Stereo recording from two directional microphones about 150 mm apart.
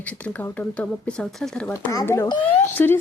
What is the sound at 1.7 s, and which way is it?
A child's voice, 20° left (ahead or behind).